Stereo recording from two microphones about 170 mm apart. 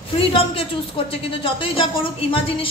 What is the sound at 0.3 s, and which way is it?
A woman's voice, 35° left (ahead or behind).